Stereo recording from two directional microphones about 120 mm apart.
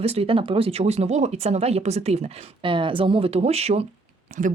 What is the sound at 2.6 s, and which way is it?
Speech, 45° right (ahead or behind).